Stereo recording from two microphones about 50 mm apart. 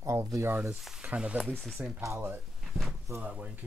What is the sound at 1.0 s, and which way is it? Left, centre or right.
Speech, right.